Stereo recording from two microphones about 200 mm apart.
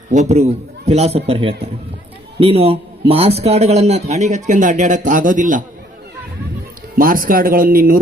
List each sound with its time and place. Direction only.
0.1 s a man's voice: 35° right (ahead or behind)
7.0 s speech: 45° right (ahead or behind)